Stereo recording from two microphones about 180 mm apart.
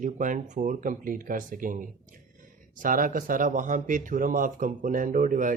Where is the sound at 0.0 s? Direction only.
45° right (ahead or behind).